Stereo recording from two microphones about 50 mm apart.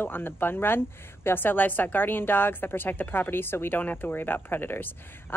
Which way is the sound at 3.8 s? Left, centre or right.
Left.